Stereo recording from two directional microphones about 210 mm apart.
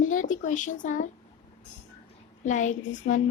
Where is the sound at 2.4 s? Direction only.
35° left (ahead or behind).